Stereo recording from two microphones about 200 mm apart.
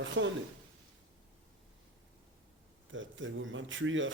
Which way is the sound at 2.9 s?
70° right (ahead or behind).